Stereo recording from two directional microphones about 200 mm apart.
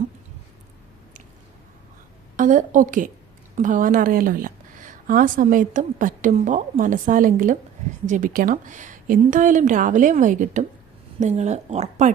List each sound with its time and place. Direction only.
2.3 s a woman's voice: 40° right (ahead or behind)